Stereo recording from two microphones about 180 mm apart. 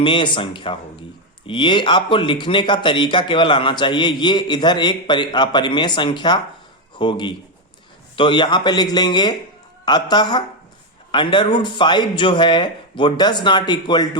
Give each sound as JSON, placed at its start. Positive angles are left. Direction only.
{"t": 0.0, "sound": "speech", "side_deg": 25}